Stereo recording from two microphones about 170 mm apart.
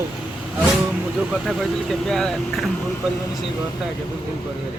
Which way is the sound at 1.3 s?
Centre (ahead or behind).